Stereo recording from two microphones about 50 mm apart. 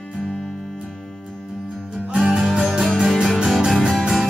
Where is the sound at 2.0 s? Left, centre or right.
Centre.